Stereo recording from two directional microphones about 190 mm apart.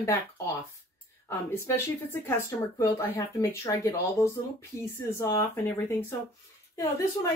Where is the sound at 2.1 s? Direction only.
15° left (ahead or behind).